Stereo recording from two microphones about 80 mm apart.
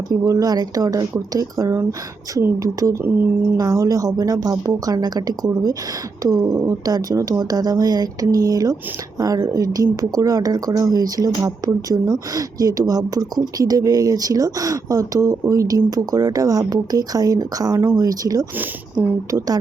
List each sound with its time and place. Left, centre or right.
0.1 s speech: right
18.5 s speech: right